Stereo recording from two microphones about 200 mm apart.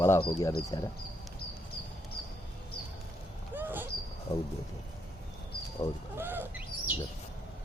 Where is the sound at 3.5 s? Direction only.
10° right (ahead or behind).